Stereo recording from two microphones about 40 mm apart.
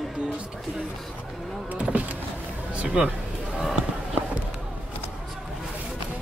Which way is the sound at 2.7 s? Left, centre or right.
Right.